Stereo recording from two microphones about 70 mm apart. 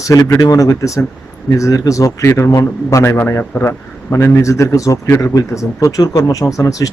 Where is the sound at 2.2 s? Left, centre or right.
Left.